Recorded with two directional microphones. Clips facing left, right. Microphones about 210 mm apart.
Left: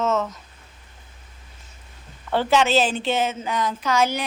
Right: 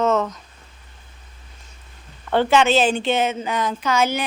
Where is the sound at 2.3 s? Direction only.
5° left (ahead or behind).